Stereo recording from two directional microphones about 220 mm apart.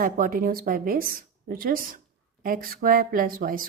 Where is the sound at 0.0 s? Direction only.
40° right (ahead or behind).